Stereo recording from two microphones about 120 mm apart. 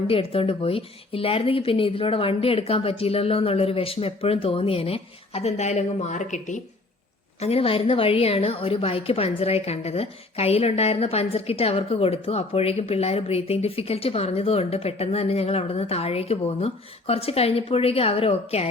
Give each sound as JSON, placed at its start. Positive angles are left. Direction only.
{"t": 0.1, "sound": "speech", "side_deg": 50}
{"t": 7.4, "sound": "a woman's voice", "side_deg": 55}